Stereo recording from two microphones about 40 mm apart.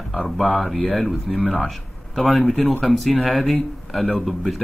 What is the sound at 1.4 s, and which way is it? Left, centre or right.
Speech, left.